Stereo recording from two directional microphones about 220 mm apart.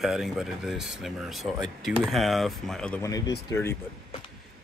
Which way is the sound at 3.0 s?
15° left (ahead or behind).